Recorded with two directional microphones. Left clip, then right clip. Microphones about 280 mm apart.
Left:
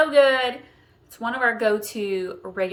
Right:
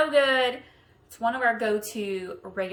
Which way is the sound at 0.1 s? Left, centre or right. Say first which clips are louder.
Left 4 dB; centre.